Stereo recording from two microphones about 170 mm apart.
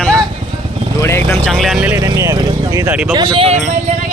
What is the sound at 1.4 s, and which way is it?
Speech, centre (ahead or behind).